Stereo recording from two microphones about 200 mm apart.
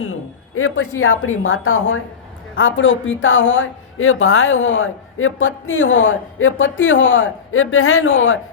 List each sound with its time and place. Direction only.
0.0 s a woman's voice: 90° left
2.6 s speech: 75° left (ahead or behind)